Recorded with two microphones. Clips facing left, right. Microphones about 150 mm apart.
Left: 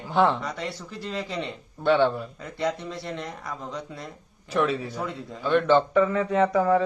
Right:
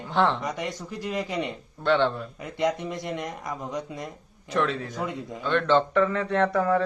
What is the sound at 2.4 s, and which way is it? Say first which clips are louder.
Speech: right 3 dB; 15° right (ahead or behind).